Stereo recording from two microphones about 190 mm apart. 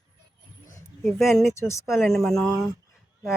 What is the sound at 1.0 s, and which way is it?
Speech, centre (ahead or behind).